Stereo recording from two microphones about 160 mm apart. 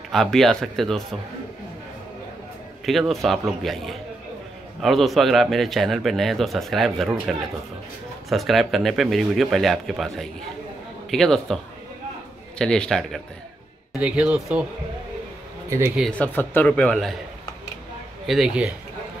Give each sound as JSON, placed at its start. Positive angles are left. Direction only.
{"t": 0.1, "sound": "a man's voice", "side_deg": 0}
{"t": 2.8, "sound": "a man's voice", "side_deg": 0}
{"t": 13.9, "sound": "speech", "side_deg": -10}
{"t": 16.1, "sound": "speech", "side_deg": 10}
{"t": 18.2, "sound": "a man's voice", "side_deg": 0}